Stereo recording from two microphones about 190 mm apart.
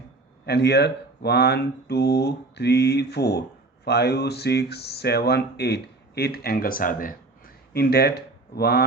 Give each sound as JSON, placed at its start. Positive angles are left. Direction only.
{"t": 0.4, "sound": "speech", "side_deg": 60}